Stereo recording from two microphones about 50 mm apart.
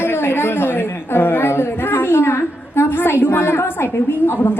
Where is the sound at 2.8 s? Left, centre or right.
Left.